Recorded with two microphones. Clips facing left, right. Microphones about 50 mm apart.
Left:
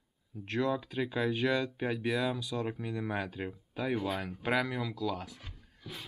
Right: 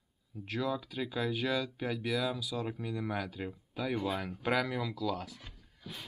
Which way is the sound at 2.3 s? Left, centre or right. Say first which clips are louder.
Left 2 dB; centre.